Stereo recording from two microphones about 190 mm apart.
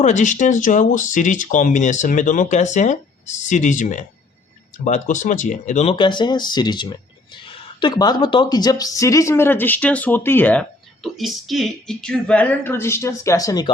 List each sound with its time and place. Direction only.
0.0 s a woman's voice: 40° left (ahead or behind); by 13.7 s 20° left (ahead or behind)